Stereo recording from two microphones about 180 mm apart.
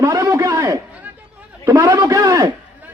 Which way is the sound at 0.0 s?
15° right (ahead or behind).